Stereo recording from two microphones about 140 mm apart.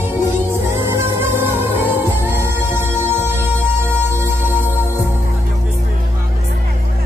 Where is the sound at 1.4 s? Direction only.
15° right (ahead or behind).